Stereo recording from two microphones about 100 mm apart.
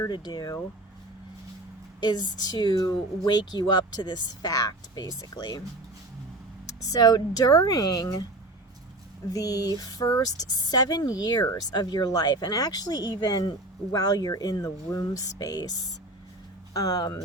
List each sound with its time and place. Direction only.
0.1 s speech: 45° left (ahead or behind)
2.0 s speech: 45° left (ahead or behind)
6.9 s speech: 40° left (ahead or behind)
9.3 s speech: 35° left (ahead or behind)
16.7 s speech: 40° left (ahead or behind)